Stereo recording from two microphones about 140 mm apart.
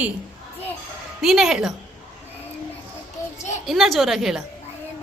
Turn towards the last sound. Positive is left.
turn(degrees=0)  # may be behind; listen again after turning